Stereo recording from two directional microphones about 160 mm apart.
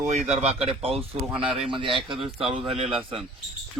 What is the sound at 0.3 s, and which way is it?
Speech, 40° right (ahead or behind).